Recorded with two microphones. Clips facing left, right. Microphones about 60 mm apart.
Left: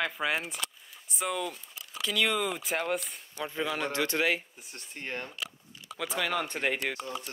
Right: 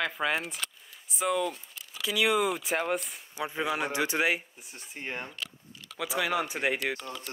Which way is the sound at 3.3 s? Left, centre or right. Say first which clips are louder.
Right 2 dB; centre.